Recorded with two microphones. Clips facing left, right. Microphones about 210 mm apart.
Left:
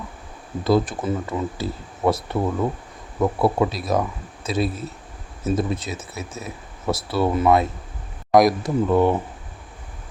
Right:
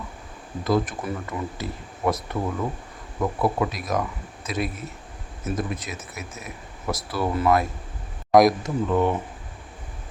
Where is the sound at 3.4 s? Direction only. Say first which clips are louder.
Left 3 dB; 30° left (ahead or behind).